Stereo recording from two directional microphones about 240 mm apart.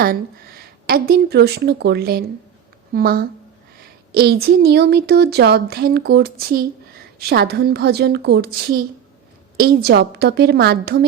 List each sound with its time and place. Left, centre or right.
0.0 s a woman's voice: right